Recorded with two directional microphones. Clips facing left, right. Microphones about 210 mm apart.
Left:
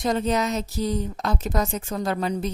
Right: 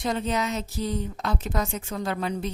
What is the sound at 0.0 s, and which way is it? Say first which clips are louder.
A woman's voice: left 4 dB; 40° left (ahead or behind).